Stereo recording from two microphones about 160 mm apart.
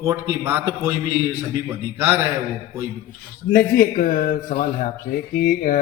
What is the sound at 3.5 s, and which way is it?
A man's voice, 60° left (ahead or behind).